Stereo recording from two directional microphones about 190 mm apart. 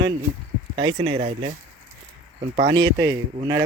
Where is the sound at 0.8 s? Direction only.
30° right (ahead or behind).